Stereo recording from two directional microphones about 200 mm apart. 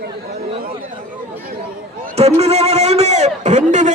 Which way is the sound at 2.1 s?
30° right (ahead or behind).